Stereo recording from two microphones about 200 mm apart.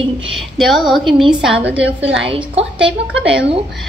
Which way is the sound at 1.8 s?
65° right (ahead or behind).